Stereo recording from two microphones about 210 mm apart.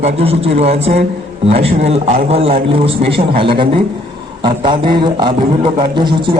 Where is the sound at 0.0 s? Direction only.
30° right (ahead or behind).